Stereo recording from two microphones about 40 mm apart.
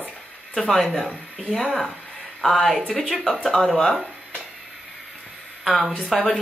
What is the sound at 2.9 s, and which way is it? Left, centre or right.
Speech, centre.